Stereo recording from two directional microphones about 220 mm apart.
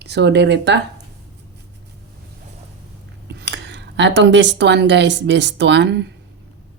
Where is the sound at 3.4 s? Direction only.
50° right (ahead or behind).